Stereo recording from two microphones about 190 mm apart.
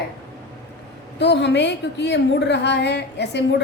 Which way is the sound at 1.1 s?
65° left (ahead or behind).